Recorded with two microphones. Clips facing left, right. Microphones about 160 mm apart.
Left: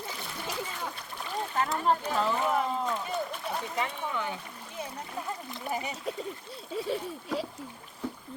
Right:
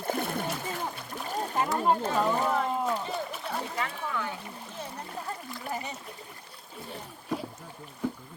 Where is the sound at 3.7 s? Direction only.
20° left (ahead or behind).